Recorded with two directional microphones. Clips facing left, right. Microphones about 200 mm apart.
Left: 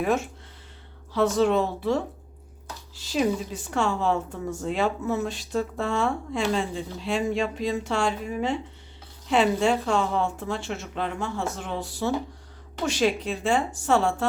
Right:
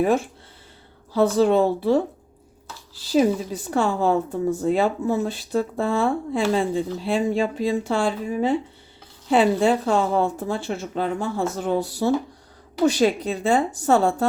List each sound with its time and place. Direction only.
0.0 s a woman's voice: 35° right (ahead or behind)